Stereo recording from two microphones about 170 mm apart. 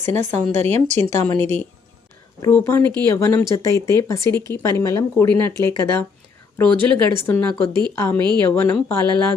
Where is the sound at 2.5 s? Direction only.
15° left (ahead or behind).